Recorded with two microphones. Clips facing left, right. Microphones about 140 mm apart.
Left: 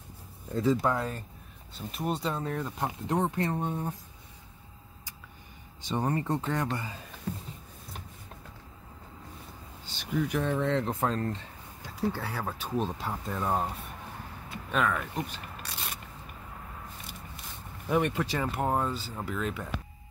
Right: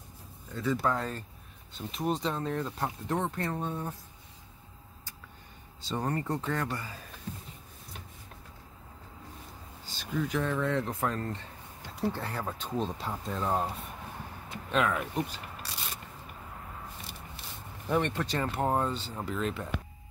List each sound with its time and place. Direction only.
0.5 s speech: 30° left (ahead or behind)
0.8 s speech: 10° left (ahead or behind)
2.8 s speech: 20° left (ahead or behind)
5.8 s speech: 20° left (ahead or behind)
9.8 s speech: 20° left (ahead or behind)
11.9 s speech: 5° left (ahead or behind)
14.7 s speech: centre (ahead or behind)
17.8 s speech: 5° left (ahead or behind)